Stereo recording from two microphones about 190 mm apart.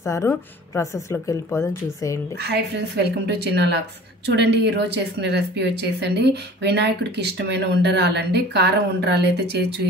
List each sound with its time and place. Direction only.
0.0 s a woman's voice: 15° left (ahead or behind)
2.3 s speech: 60° right (ahead or behind)